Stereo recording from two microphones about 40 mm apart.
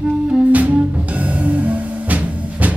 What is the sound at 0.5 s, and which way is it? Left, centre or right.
Music, right.